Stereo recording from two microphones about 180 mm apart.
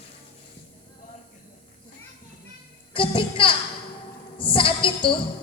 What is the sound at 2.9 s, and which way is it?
A woman's voice, 30° left (ahead or behind).